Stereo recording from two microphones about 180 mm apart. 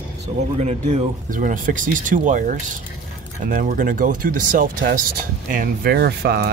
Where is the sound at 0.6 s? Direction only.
40° right (ahead or behind).